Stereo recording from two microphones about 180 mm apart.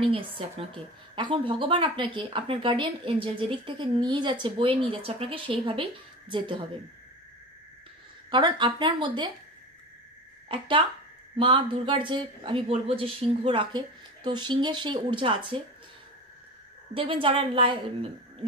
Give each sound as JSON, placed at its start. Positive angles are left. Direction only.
{"t": 0.0, "sound": "a woman's voice", "side_deg": -30}
{"t": 8.3, "sound": "a woman's voice", "side_deg": -25}
{"t": 10.5, "sound": "a woman's voice", "side_deg": -30}
{"t": 16.9, "sound": "a woman's voice", "side_deg": -30}